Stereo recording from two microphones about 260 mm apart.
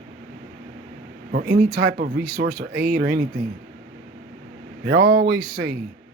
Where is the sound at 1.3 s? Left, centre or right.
Right.